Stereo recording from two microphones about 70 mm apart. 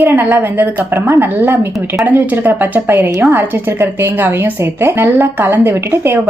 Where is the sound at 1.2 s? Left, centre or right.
Right.